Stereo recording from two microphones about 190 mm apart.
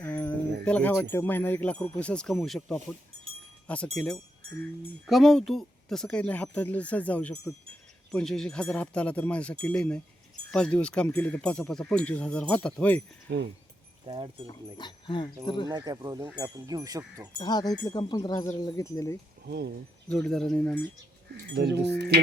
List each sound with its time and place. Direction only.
0.0 s jingle bell: 10° left (ahead or behind)
0.6 s a sound: 5° left (ahead or behind)
1.1 s speech: 10° left (ahead or behind)
13.3 s speech: 65° right (ahead or behind)
14.1 s speech: 25° right (ahead or behind)
14.4 s speech: 25° left (ahead or behind)
15.7 s speech: 20° right (ahead or behind)
17.3 s speech: 20° left (ahead or behind)
19.5 s speech: 60° right (ahead or behind)
20.1 s speech: 5° left (ahead or behind)
21.5 s speech: 60° right (ahead or behind)